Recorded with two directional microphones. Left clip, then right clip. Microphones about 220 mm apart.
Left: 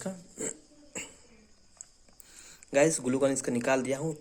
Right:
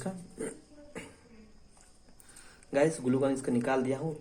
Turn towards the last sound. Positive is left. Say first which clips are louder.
# left 2 dB
turn(degrees=25)  # may be behind; listen again after turning